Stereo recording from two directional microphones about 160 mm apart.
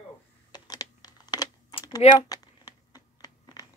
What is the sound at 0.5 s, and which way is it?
Crumpling, 25° left (ahead or behind).